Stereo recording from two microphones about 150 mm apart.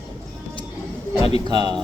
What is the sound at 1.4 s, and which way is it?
Speech, 30° right (ahead or behind).